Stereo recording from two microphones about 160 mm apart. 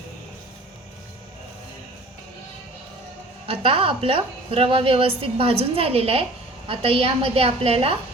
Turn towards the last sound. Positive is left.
turn(degrees=-40)  # may be behind; listen again after turning